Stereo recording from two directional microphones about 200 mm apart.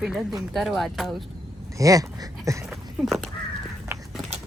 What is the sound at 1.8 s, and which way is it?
Speech, 15° right (ahead or behind).